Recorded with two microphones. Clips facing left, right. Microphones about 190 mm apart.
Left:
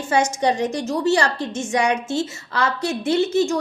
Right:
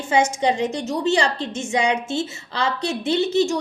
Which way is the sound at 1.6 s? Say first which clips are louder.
Left 1 dB; 15° right (ahead or behind).